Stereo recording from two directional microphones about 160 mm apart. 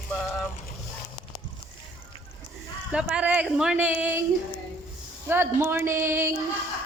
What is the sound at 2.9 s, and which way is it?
Speech, 5° right (ahead or behind).